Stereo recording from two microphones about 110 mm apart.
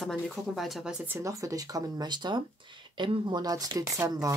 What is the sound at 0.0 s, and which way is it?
Speech, centre (ahead or behind).